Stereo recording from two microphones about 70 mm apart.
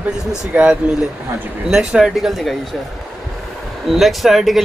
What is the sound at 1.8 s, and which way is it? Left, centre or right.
Speech, centre.